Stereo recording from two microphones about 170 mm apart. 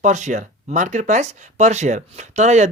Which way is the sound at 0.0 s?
45° right (ahead or behind).